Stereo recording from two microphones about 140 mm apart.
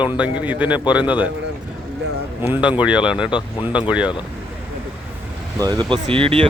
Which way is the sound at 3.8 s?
10° right (ahead or behind).